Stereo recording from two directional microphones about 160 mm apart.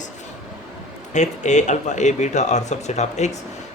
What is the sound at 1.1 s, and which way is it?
Speech, 45° left (ahead or behind).